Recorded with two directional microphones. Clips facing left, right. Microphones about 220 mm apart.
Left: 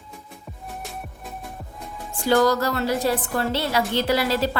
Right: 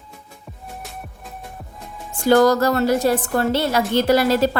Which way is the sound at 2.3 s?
45° right (ahead or behind).